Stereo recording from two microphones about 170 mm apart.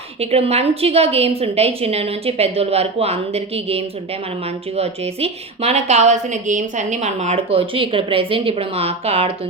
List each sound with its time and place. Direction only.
0.2 s a woman's voice: 35° right (ahead or behind)